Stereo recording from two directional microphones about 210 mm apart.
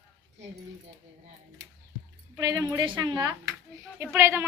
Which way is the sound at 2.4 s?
20° right (ahead or behind).